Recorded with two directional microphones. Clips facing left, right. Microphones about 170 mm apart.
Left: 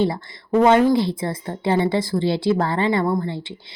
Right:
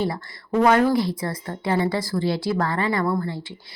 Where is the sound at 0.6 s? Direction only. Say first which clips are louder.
Left 2 dB; 20° left (ahead or behind).